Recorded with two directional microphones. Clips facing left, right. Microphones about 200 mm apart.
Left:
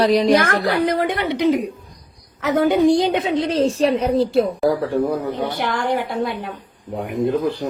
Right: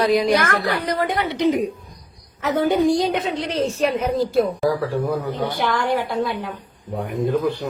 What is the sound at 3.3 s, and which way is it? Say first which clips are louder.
A woman's voice: left 5 dB; 30° left (ahead or behind).